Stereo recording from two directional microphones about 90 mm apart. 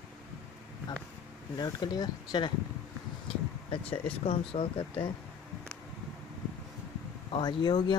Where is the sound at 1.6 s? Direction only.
50° left (ahead or behind).